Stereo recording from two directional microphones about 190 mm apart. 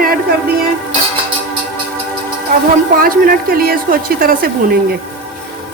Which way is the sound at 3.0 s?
50° right (ahead or behind).